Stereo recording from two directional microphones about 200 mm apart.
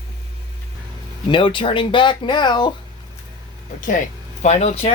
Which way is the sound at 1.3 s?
25° left (ahead or behind).